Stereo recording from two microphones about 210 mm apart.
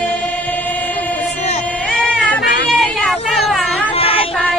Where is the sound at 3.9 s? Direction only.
25° left (ahead or behind).